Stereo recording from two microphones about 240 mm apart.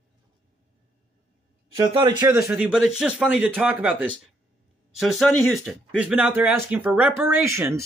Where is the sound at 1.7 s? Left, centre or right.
Centre.